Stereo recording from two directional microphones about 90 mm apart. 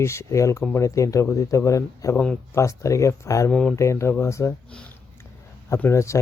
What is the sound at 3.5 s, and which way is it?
Speech, 15° left (ahead or behind).